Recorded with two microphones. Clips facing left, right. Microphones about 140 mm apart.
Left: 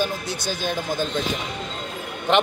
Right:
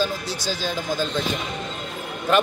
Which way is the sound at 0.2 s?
55° left (ahead or behind).